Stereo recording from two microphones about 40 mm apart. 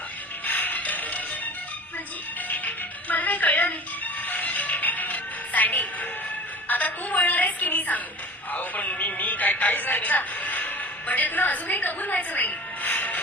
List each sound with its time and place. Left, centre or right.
0.4 s music: left
2.5 s music: left
6.7 s a sound: left
11.1 s a woman's voice: left